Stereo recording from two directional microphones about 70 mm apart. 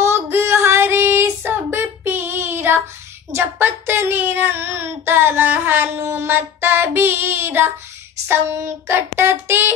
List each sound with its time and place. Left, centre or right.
0.0 s child singing: right